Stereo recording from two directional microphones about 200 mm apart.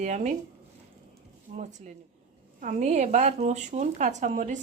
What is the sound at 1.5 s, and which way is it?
Speech, 35° right (ahead or behind).